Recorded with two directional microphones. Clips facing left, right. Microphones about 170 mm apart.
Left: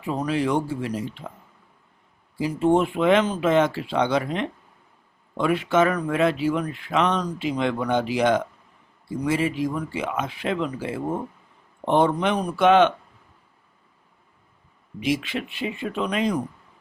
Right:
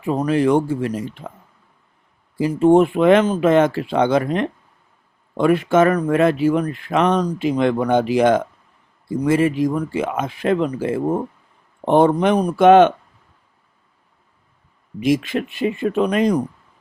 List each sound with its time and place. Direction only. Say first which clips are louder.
0.0 s speech: right 7 dB; 45° right (ahead or behind)
2.4 s speech: right 7 dB; 50° right (ahead or behind)
15.0 s speech: right 7 dB; 45° right (ahead or behind)